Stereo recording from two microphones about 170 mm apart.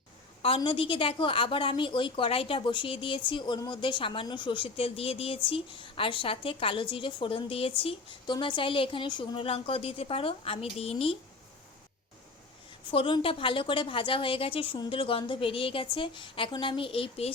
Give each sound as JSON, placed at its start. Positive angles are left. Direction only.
{"t": 0.4, "sound": "a woman's voice", "side_deg": 35}
{"t": 12.9, "sound": "a woman's voice", "side_deg": 30}